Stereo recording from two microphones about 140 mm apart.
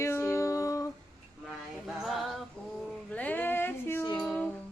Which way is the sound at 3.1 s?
10° left (ahead or behind).